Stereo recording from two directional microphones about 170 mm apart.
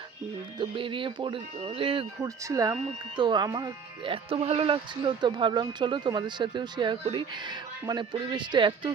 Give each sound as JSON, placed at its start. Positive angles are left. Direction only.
{"t": 0.6, "sound": "speech", "side_deg": -30}
{"t": 2.2, "sound": "speech", "side_deg": -20}